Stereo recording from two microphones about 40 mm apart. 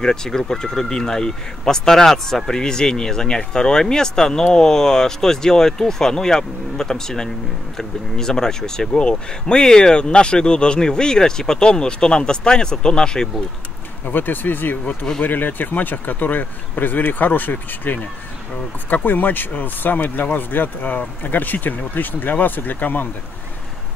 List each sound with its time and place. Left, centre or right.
0.0 s speech: centre
14.0 s speech: left
19.0 s speech: left